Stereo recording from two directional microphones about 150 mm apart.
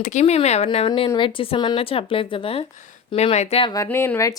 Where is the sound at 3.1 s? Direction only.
45° left (ahead or behind).